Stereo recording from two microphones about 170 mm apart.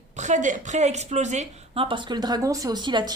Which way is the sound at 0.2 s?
45° right (ahead or behind).